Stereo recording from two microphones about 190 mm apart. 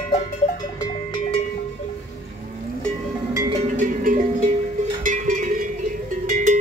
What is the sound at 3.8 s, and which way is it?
Music, 45° right (ahead or behind).